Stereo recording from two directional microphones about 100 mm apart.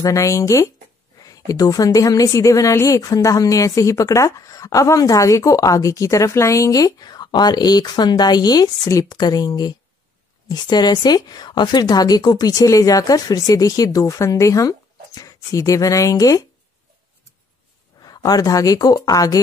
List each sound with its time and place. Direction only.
0.0 s a woman's voice: 35° left (ahead or behind)
18.0 s a woman's voice: 40° left (ahead or behind)